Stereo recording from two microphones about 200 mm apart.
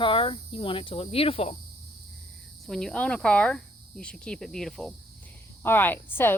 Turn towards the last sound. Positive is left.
turn(degrees=10)  # may be behind; listen again after turning